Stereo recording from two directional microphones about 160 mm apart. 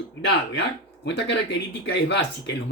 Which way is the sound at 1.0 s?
90° left.